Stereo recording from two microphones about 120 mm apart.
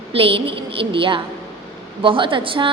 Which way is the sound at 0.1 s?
50° right (ahead or behind).